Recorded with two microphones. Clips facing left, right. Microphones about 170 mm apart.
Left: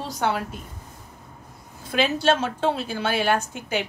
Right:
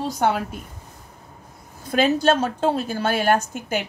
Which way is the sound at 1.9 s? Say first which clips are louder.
Right 3 dB; 45° right (ahead or behind).